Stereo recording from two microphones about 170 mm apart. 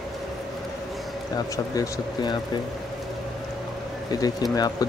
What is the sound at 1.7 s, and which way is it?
Speech, 25° left (ahead or behind).